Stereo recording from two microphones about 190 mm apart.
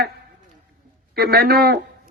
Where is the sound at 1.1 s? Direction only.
55° right (ahead or behind).